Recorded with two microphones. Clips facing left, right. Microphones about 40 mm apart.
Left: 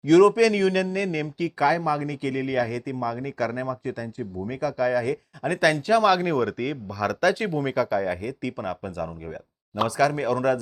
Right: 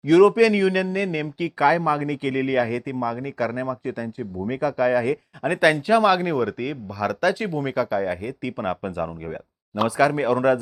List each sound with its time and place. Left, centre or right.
0.0 s speech: centre
8.6 s speech: right